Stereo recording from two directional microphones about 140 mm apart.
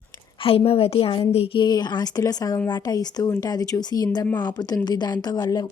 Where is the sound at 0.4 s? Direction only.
45° left (ahead or behind).